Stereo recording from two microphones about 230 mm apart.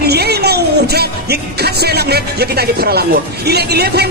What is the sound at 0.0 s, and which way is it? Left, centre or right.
Speech, right.